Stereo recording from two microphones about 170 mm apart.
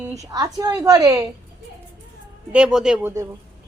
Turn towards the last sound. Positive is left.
turn(degrees=-5)  # may be behind; listen again after turning